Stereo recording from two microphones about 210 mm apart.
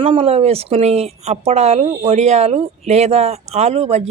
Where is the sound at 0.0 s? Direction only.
30° right (ahead or behind).